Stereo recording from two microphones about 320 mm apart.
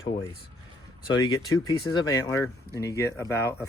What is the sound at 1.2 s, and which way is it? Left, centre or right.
Speech, centre.